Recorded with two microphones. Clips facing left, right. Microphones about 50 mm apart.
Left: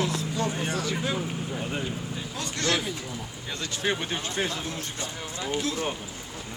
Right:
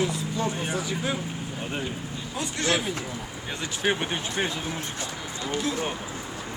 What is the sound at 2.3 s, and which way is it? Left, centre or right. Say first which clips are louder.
Speech: right 2 dB; centre.